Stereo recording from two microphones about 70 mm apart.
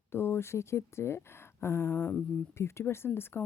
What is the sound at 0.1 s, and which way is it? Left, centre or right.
Speech, left.